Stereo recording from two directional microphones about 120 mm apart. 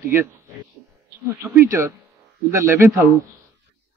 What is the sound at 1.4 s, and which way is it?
A man's voice, 25° right (ahead or behind).